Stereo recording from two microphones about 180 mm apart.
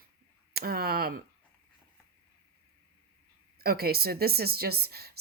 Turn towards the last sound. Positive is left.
turn(degrees=-60)  # may be behind; listen again after turning